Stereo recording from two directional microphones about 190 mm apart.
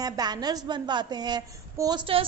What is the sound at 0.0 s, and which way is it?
A woman's voice, 20° right (ahead or behind).